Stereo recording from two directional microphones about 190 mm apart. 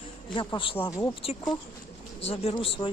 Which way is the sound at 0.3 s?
25° left (ahead or behind).